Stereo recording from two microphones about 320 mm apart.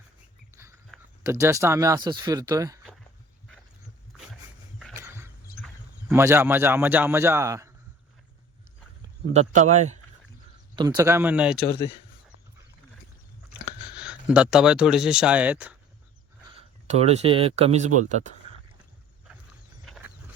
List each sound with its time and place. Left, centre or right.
0.5 s speech: centre
4.8 s a sound: centre
9.3 s speech: right; by 11.5 s centre
14.0 s speech: centre
16.6 s speech: centre